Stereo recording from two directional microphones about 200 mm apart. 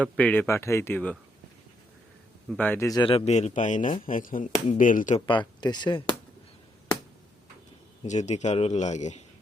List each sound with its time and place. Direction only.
0.0 s speech: 5° left (ahead or behind)
2.5 s a man's voice: 10° left (ahead or behind); by 5.2 s 40° left (ahead or behind)
5.2 s speech: 20° left (ahead or behind)
8.0 s a man's voice: 35° left (ahead or behind)